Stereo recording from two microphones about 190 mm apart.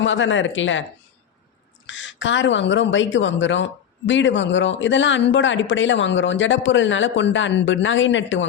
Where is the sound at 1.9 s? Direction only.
75° left (ahead or behind).